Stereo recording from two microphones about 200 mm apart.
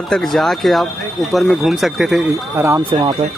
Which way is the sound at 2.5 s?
15° right (ahead or behind).